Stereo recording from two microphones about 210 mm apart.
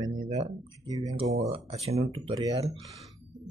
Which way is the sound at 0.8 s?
15° right (ahead or behind).